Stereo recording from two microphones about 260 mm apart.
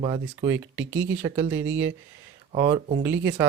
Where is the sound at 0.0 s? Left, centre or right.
Centre.